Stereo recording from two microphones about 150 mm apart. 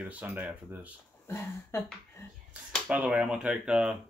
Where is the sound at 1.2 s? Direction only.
15° left (ahead or behind).